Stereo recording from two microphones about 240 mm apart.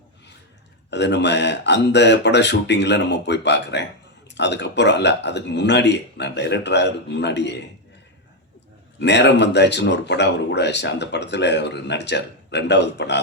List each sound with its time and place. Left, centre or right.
0.9 s speech: left
9.0 s speech: left